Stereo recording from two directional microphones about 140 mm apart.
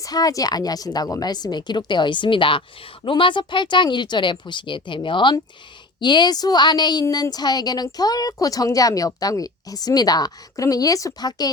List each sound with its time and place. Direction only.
0.0 s a woman's voice: 25° left (ahead or behind)